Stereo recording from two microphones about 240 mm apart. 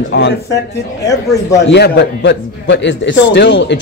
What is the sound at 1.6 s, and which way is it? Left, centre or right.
A man's voice, left.